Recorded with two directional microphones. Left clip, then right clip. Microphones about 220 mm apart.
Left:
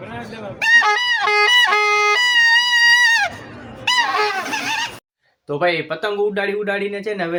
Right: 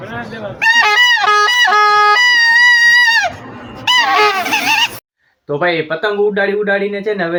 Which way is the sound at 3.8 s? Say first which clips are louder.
Right 6 dB; 10° right (ahead or behind).